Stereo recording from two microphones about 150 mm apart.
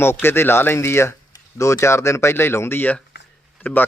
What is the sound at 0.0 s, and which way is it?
Speech, 15° left (ahead or behind).